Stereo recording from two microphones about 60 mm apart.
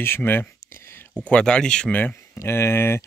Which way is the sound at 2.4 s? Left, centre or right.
Left.